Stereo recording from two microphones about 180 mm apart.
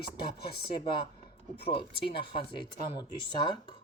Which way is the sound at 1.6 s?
30° left (ahead or behind).